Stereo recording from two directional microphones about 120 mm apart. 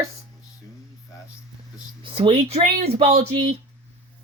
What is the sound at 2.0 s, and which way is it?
Speech, 50° right (ahead or behind).